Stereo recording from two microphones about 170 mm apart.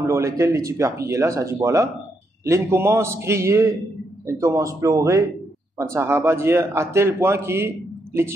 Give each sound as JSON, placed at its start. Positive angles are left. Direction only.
{"t": 0.0, "sound": "a man's voice", "side_deg": -20}